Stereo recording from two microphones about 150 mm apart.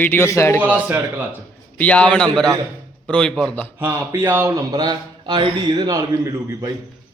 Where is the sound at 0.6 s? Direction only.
10° right (ahead or behind).